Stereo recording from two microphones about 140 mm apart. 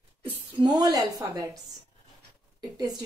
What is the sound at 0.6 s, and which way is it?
Speech, 30° right (ahead or behind).